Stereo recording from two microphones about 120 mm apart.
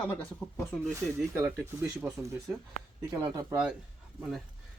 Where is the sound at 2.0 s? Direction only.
5° right (ahead or behind).